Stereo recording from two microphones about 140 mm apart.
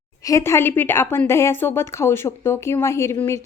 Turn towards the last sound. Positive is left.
turn(degrees=20)  # may be behind; listen again after turning